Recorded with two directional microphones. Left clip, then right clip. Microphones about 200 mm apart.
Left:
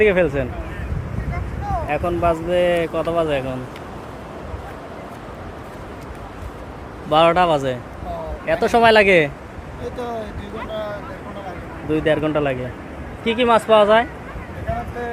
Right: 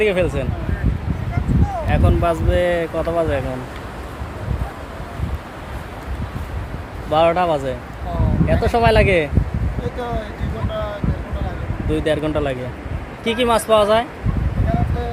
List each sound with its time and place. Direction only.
0.0 s speech: 15° left (ahead or behind)
1.9 s speech: centre (ahead or behind)
7.1 s speech: 15° left (ahead or behind)
11.9 s speech: 5° left (ahead or behind)